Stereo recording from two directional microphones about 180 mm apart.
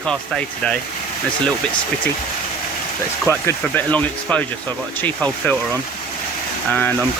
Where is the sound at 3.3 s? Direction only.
10° left (ahead or behind).